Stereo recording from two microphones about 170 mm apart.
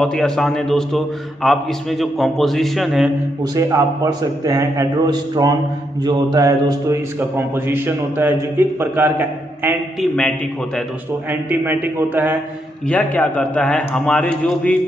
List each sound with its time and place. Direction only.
0.0 s a man's voice: 5° left (ahead or behind)
3.5 s a man's voice: 20° right (ahead or behind)
11.2 s a man's voice: 10° right (ahead or behind)
12.8 s a man's voice: 10° left (ahead or behind)